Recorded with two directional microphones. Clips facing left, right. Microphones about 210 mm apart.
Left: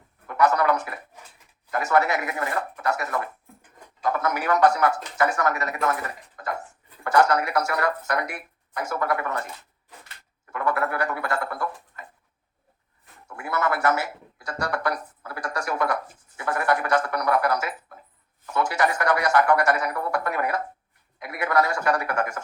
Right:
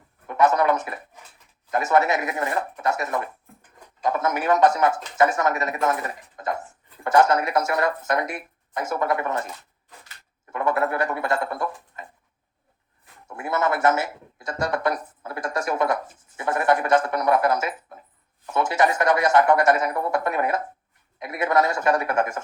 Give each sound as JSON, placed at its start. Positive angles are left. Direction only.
{"t": 0.3, "sound": "speech", "side_deg": -20}
{"t": 10.5, "sound": "speech", "side_deg": -20}
{"t": 13.2, "sound": "speech", "side_deg": -20}
{"t": 16.4, "sound": "a sound", "side_deg": -20}
{"t": 18.5, "sound": "a man's voice", "side_deg": -20}